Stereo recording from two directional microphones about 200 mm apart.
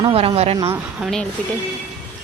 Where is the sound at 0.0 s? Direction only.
30° right (ahead or behind).